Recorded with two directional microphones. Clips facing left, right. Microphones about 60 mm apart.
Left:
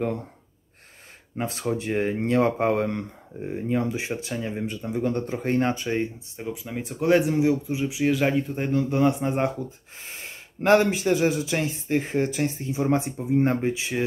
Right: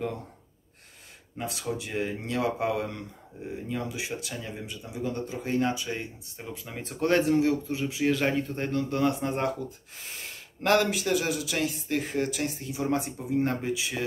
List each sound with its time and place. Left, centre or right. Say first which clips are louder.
1.4 s speech: left 6 dB; left
4.8 s speech: left 6 dB; left
6.4 s speech: left 7 dB; centre; by 14.0 s left